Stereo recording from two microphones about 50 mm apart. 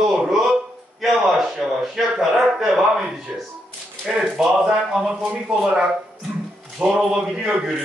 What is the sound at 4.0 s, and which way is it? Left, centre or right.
Speech, centre.